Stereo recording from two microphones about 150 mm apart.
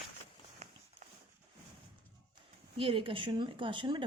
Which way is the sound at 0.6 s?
45° right (ahead or behind).